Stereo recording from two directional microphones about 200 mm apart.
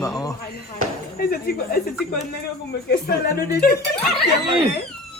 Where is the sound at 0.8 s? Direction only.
50° left (ahead or behind).